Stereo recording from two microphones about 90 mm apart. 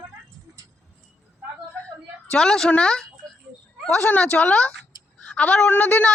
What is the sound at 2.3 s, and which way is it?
A woman's voice, 5° left (ahead or behind).